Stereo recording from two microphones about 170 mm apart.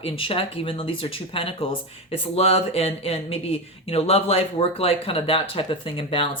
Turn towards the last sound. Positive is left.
turn(degrees=30)  # may be behind; listen again after turning